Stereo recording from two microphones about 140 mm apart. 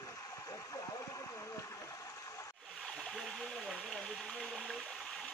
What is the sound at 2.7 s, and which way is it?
Splash, 5° left (ahead or behind).